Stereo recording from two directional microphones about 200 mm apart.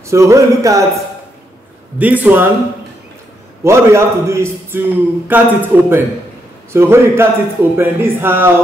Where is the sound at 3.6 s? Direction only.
15° right (ahead or behind).